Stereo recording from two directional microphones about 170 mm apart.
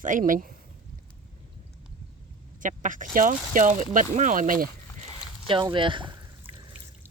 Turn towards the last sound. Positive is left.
turn(degrees=-30)  # may be behind; listen again after turning